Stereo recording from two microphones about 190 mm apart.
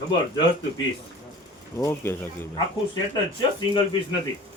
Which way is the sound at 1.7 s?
15° left (ahead or behind).